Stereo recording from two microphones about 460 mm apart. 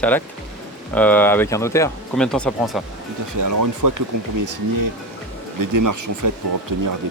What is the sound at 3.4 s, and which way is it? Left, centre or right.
Speech, right.